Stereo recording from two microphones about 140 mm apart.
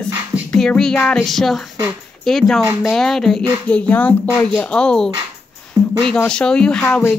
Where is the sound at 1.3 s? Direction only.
Centre (ahead or behind).